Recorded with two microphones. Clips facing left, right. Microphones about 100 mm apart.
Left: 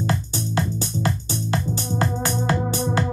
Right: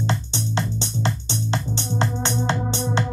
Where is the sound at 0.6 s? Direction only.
25° right (ahead or behind).